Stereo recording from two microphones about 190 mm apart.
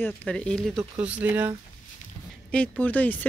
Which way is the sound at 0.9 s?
10° right (ahead or behind).